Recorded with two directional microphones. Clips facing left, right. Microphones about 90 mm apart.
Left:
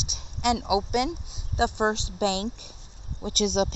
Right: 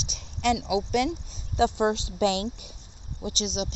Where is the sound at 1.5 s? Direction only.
25° left (ahead or behind).